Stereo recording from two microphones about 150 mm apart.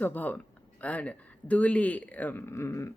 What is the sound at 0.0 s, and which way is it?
Speech, 10° left (ahead or behind).